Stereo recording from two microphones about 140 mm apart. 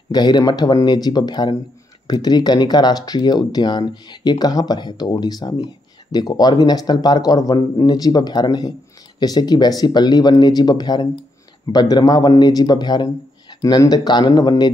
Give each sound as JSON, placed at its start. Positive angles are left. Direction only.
{"t": 0.1, "sound": "speech", "side_deg": 30}